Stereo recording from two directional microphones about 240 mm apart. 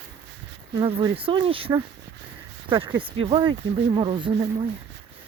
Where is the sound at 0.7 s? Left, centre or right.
Centre.